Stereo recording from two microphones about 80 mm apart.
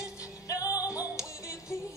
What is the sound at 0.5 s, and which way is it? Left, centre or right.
Music, left.